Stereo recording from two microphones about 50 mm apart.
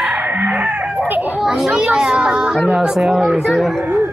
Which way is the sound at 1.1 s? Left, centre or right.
Right.